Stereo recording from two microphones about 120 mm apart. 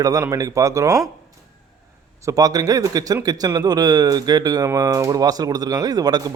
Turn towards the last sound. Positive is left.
turn(degrees=-35)  # may be behind; listen again after turning